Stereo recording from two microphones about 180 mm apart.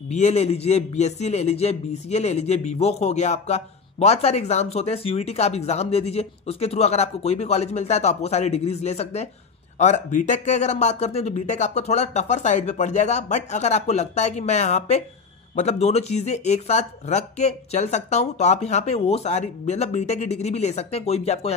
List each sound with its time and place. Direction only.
0.1 s a man's voice: 40° left (ahead or behind)